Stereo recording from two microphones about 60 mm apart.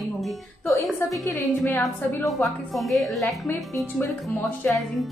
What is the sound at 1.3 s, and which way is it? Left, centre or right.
Speech, left.